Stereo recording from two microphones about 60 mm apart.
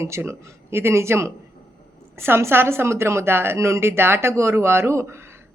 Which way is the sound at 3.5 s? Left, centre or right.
Right.